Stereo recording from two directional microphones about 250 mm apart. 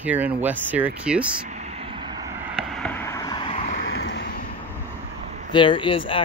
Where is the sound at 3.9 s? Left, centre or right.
Left.